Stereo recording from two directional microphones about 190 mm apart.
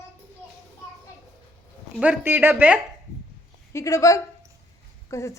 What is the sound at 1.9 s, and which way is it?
Speech, 5° right (ahead or behind).